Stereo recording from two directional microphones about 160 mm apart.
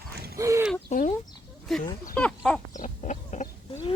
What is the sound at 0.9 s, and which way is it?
Chicken, 50° left (ahead or behind).